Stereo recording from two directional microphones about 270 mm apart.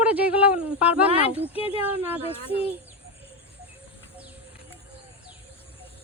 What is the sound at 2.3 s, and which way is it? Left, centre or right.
Speech, left.